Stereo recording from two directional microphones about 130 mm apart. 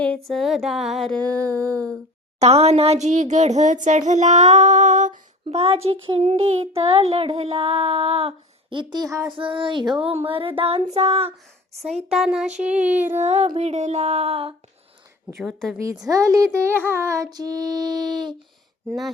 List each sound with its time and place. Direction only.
0.3 s a sound: centre (ahead or behind)
2.4 s a child's voice: 55° right (ahead or behind); by 5.5 s 75° right (ahead or behind)
5.5 s child singing: 50° right (ahead or behind); by 9.3 s 30° right (ahead or behind)
9.3 s child singing: 40° right (ahead or behind)
11.9 s a child's voice: 55° right (ahead or behind)
12.1 s a sound: 5° right (ahead or behind)
13.1 s a child's voice: 60° right (ahead or behind)
15.4 s a sound: centre (ahead or behind)
15.8 s speech: 25° right (ahead or behind)
17.3 s female singing: 30° right (ahead or behind)